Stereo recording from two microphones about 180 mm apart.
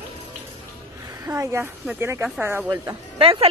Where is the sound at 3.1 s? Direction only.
30° right (ahead or behind).